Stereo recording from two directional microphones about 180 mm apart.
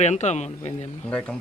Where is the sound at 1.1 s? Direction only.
5° left (ahead or behind).